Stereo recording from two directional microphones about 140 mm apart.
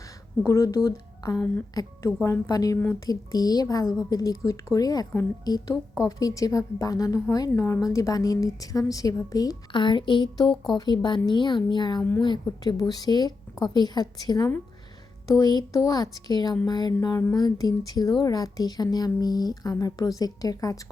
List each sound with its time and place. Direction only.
0.4 s a woman's voice: 20° left (ahead or behind)